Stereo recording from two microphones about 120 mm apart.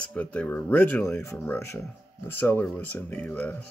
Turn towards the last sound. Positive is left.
turn(degrees=15)  # may be behind; listen again after turning